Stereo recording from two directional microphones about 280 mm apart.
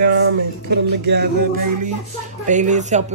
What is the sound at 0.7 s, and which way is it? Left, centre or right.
Music, right.